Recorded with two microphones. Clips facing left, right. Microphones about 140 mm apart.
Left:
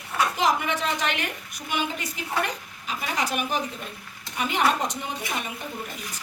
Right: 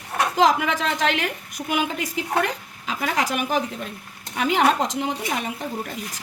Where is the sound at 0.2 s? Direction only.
90° right.